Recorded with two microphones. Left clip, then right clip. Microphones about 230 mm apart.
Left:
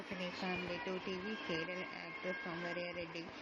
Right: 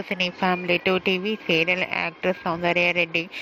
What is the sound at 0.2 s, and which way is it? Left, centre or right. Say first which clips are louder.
Speech: right 18 dB; right.